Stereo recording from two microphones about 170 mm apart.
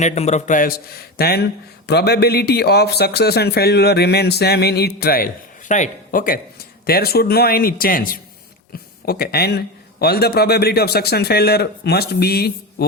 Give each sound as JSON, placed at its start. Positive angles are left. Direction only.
{"t": 0.0, "sound": "a man's voice", "side_deg": 40}